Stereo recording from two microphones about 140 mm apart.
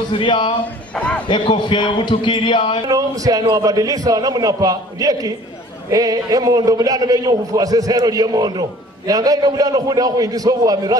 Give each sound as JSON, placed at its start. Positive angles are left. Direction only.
{"t": 0.1, "sound": "a man's voice", "side_deg": 35}
{"t": 0.9, "sound": "a man's voice", "side_deg": 10}
{"t": 1.3, "sound": "a man's voice", "side_deg": 35}
{"t": 2.9, "sound": "a man's voice", "side_deg": -25}